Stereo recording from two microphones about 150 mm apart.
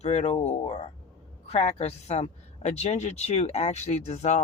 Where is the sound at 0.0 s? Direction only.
45° left (ahead or behind).